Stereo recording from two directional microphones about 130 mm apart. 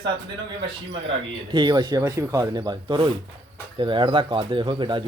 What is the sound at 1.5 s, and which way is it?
Speech, 35° right (ahead or behind).